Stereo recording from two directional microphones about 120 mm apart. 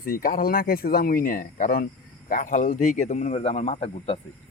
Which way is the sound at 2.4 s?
90° left.